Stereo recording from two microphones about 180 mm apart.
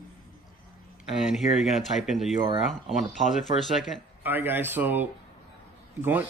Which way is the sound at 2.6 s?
45° left (ahead or behind).